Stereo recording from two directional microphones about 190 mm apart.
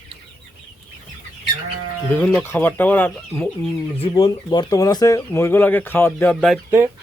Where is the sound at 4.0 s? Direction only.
30° left (ahead or behind); by 6.6 s centre (ahead or behind).